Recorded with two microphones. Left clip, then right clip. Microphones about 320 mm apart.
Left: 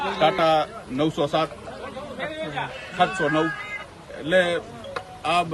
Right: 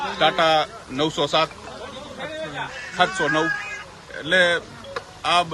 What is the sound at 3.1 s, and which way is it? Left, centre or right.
A man's voice, centre.